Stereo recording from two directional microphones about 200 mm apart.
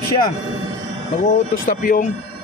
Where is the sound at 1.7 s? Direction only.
40° left (ahead or behind).